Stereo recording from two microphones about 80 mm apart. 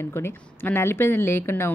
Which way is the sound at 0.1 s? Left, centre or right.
Left.